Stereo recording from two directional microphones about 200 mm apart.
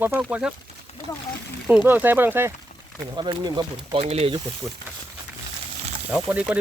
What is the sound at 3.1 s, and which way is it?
Speech, 20° right (ahead or behind).